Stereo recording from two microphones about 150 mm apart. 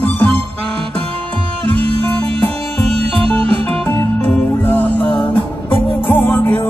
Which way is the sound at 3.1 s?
40° right (ahead or behind).